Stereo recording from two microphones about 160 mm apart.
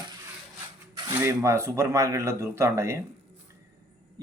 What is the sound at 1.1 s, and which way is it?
Speech, 15° right (ahead or behind).